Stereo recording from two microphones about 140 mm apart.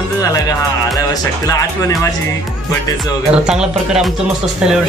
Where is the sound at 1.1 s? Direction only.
25° left (ahead or behind).